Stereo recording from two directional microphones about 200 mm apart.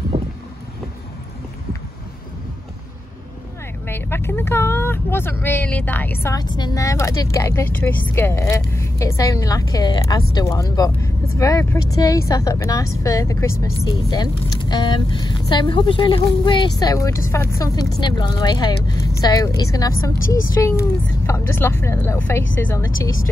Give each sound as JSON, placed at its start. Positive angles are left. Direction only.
{"t": 0.1, "sound": "boat", "side_deg": -30}
{"t": 3.8, "sound": "a woman's voice", "side_deg": 10}
{"t": 6.2, "sound": "a woman's voice", "side_deg": 20}